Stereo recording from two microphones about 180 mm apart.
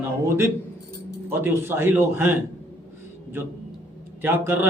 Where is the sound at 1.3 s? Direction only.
10° right (ahead or behind).